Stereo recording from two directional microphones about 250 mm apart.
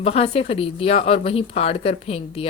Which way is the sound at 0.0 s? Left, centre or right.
Left.